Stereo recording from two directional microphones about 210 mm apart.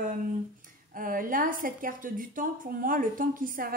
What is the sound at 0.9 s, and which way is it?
A woman's voice, 40° right (ahead or behind).